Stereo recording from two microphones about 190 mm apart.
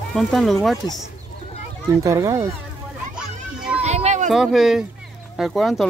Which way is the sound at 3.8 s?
35° right (ahead or behind).